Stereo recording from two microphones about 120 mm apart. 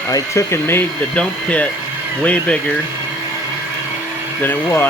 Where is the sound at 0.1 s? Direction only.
25° left (ahead or behind).